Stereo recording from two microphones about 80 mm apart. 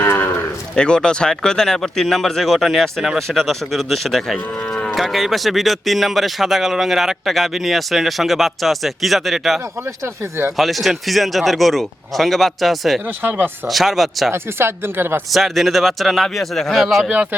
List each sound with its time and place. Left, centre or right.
0.0 s cattle: left
0.8 s a man's voice: centre
10.6 s a man's voice: centre
14.3 s speech: right
15.3 s a man's voice: centre